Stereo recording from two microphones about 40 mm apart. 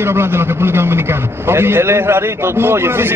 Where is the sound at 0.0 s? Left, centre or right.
Right.